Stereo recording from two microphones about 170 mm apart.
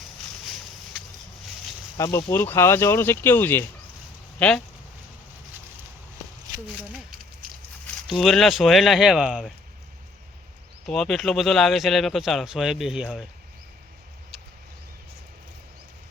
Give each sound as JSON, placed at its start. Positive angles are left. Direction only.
{"t": 2.0, "sound": "speech", "side_deg": 20}
{"t": 8.2, "sound": "speech", "side_deg": 0}
{"t": 10.8, "sound": "speech", "side_deg": 5}